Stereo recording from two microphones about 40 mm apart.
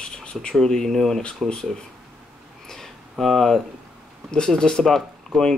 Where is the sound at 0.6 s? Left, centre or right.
Centre.